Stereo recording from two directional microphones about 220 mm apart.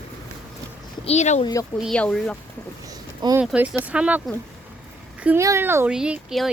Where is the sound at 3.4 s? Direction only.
5° right (ahead or behind).